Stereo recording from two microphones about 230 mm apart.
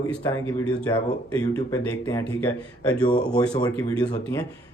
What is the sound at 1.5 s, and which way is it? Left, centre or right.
Speech, centre.